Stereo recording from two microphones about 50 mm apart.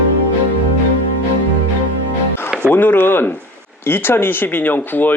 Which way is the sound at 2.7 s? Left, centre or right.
Left.